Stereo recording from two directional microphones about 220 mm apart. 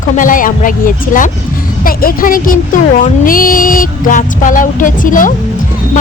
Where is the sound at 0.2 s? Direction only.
35° left (ahead or behind).